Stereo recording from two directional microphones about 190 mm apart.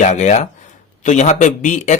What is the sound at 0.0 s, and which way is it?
A man's voice, 40° left (ahead or behind).